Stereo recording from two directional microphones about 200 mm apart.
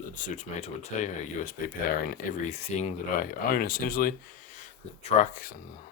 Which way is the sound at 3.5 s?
45° left (ahead or behind).